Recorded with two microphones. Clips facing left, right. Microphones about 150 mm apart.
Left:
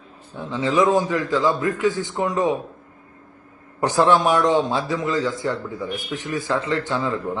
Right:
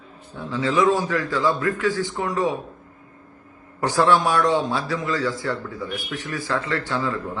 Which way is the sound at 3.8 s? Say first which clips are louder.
Left 2 dB; 20° left (ahead or behind).